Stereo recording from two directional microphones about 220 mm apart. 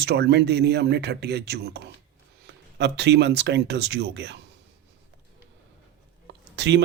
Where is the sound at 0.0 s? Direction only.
50° right (ahead or behind).